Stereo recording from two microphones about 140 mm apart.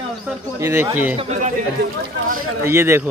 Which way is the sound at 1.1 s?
50° right (ahead or behind).